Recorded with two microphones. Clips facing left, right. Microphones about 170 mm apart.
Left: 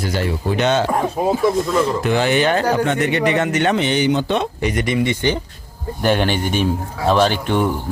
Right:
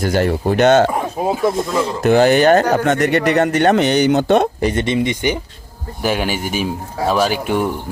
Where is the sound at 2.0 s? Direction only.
45° right (ahead or behind).